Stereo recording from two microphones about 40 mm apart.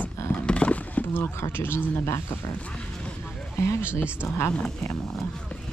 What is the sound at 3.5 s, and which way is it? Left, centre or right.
Speech, left.